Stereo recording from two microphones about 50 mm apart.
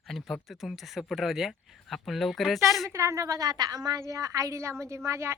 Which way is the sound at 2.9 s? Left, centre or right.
Right.